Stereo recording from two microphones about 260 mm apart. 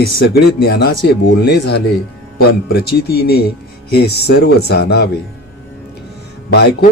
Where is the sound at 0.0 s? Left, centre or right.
Left.